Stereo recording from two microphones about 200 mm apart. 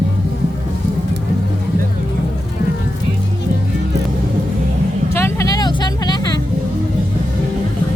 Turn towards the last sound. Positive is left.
turn(degrees=20)  # may be behind; listen again after turning